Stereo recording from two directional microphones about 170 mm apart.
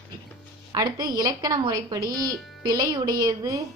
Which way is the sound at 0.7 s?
25° right (ahead or behind).